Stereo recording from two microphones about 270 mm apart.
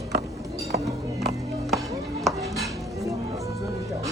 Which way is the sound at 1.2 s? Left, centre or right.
Centre.